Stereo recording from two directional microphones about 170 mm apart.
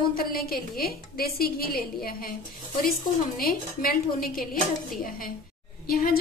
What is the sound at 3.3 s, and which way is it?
A woman's voice, 60° left (ahead or behind).